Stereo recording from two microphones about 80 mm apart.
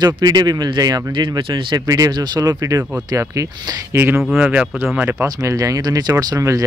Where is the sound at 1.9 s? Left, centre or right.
Right.